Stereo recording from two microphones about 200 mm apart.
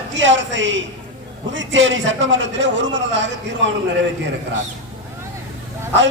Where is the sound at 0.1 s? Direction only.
70° right (ahead or behind).